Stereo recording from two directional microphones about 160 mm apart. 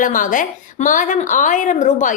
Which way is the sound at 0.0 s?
55° left (ahead or behind).